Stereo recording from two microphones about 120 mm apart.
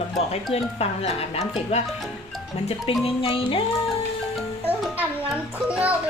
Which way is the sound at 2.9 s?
45° left (ahead or behind).